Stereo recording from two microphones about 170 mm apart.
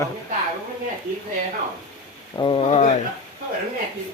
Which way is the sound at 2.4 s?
30° left (ahead or behind).